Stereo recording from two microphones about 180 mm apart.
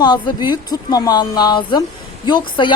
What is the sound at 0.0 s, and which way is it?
Speech, 25° left (ahead or behind).